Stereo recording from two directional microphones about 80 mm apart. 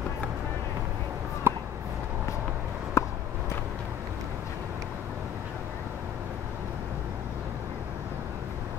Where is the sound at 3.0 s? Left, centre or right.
Left.